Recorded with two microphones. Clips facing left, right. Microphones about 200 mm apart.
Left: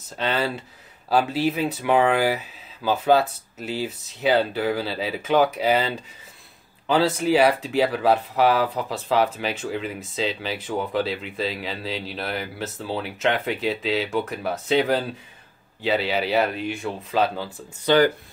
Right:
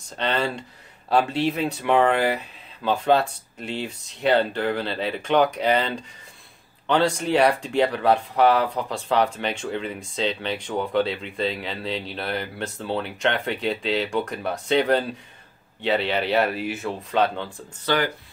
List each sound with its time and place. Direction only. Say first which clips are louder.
0.2 s speech: even; 5° left (ahead or behind)
17.9 s speech: left 6 dB; 20° left (ahead or behind)